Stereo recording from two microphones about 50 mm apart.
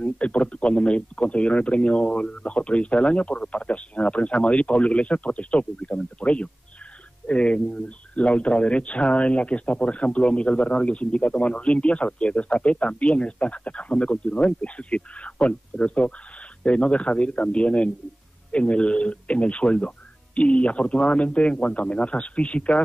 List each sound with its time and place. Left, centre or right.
0.0 s speech: left